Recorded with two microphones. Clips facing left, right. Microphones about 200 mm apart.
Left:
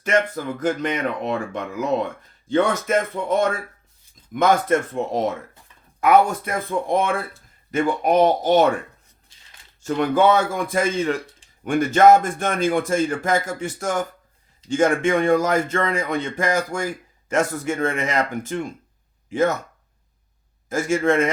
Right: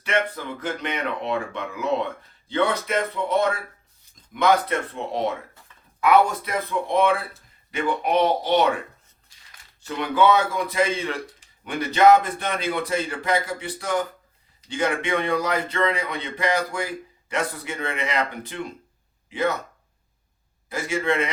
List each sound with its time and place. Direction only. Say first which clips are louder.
0.0 s speech: left 4 dB; 45° left (ahead or behind)
9.8 s speech: left 3 dB; 45° left (ahead or behind)
20.7 s speech: left 5 dB; 45° left (ahead or behind)